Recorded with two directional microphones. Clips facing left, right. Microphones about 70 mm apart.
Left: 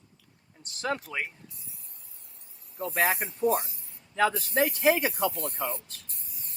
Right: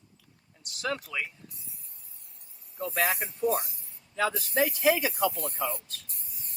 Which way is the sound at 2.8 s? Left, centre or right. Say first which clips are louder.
Left 2 dB; left.